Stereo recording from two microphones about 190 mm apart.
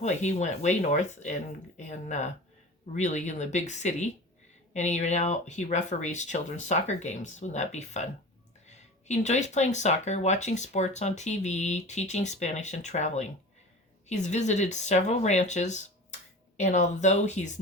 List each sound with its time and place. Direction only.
0.0 s speech: 35° left (ahead or behind)